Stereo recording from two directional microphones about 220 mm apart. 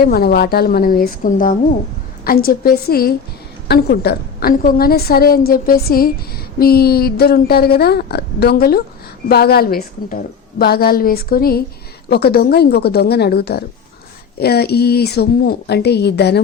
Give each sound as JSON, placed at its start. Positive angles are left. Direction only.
{"t": 0.0, "sound": "a woman's voice", "side_deg": 45}